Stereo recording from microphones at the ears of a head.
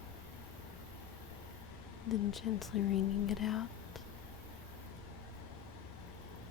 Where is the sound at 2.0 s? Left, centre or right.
Left.